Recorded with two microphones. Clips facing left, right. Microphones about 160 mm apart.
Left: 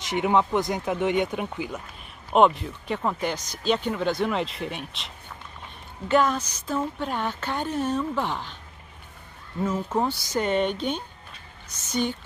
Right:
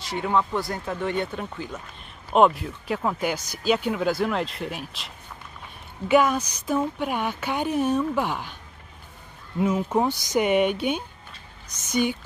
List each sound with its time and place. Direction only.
0.0 s speech: 20° left (ahead or behind)
2.3 s speech: centre (ahead or behind)
9.6 s speech: 15° right (ahead or behind)